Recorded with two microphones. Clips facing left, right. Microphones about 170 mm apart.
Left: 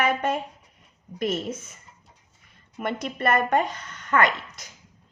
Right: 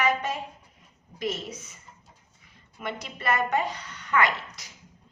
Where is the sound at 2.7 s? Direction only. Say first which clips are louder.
Left 6 dB; 50° left (ahead or behind).